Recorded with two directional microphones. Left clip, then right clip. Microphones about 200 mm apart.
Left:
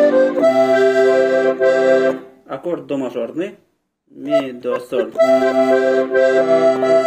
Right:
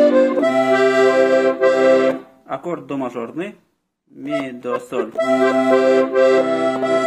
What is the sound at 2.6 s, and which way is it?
Speech, 30° right (ahead or behind).